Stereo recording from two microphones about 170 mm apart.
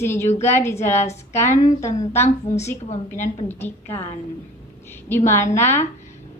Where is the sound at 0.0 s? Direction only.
15° left (ahead or behind).